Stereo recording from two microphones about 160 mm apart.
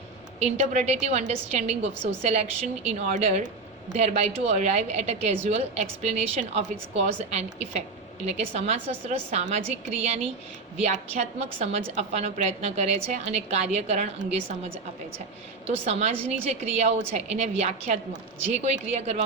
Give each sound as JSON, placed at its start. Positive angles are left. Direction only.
{"t": 0.3, "sound": "a woman's voice", "side_deg": -45}
{"t": 10.8, "sound": "a woman's voice", "side_deg": -40}